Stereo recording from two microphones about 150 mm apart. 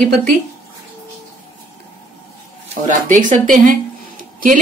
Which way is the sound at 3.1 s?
60° right (ahead or behind).